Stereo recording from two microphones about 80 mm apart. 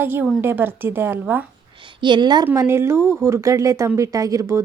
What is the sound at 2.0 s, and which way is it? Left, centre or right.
Speech, right.